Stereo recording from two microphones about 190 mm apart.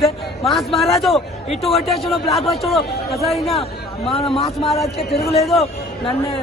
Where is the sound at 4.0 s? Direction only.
30° left (ahead or behind).